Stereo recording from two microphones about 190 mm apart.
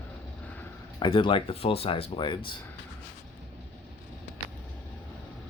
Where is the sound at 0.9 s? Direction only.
25° left (ahead or behind).